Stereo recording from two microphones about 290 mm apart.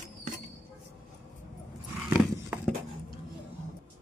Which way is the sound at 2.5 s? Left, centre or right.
Centre.